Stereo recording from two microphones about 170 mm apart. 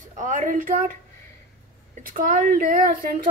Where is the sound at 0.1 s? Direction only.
50° right (ahead or behind).